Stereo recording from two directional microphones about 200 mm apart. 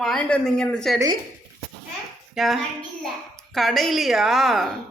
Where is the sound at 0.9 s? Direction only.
20° right (ahead or behind).